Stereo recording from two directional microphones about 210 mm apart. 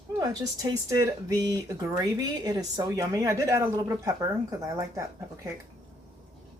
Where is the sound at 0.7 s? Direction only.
15° right (ahead or behind).